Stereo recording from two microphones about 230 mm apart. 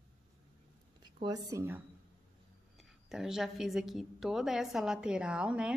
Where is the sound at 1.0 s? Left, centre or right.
Centre.